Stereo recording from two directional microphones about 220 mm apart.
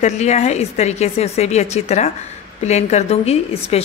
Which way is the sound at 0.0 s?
30° left (ahead or behind).